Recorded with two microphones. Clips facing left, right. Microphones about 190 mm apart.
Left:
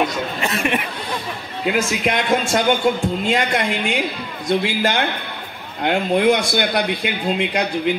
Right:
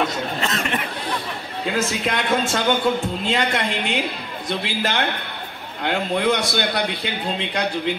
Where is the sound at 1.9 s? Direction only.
15° left (ahead or behind).